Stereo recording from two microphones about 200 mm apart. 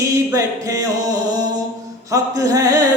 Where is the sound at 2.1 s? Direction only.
15° right (ahead or behind).